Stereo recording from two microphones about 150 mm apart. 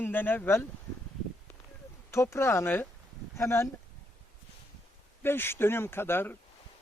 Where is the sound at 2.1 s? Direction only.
20° left (ahead or behind).